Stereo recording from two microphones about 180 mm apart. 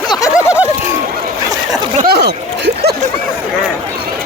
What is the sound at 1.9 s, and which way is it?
Speech, 55° right (ahead or behind).